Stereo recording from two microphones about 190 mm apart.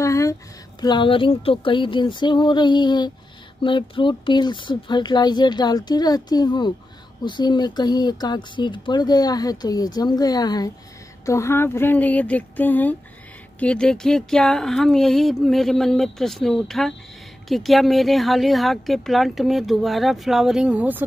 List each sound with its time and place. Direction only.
0.0 s speech: 15° left (ahead or behind); by 21.0 s 10° right (ahead or behind)